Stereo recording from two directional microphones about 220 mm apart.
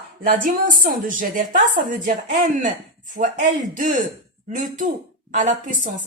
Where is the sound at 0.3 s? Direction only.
40° right (ahead or behind).